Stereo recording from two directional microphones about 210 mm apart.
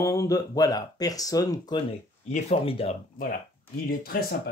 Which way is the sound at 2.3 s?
30° left (ahead or behind).